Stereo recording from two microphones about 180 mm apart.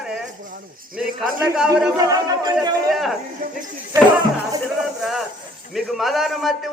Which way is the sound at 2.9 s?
Centre (ahead or behind).